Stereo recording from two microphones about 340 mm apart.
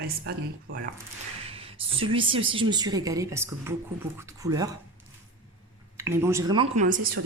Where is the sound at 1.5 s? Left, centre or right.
Centre.